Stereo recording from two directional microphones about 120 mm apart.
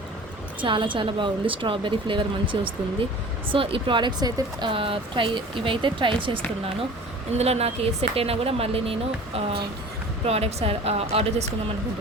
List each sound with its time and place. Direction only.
0.6 s a woman's voice: 45° right (ahead or behind)
4.7 s a woman's voice: 50° right (ahead or behind)
7.3 s speech: 60° right (ahead or behind)